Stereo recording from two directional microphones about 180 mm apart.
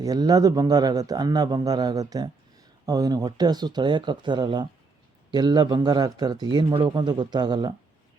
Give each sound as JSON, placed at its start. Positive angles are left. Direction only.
{"t": 0.0, "sound": "a man's voice", "side_deg": -20}